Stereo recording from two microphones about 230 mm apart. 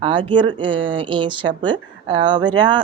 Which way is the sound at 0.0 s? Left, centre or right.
Right.